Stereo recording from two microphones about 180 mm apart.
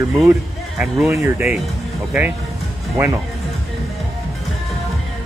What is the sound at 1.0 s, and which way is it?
Speech, 15° right (ahead or behind).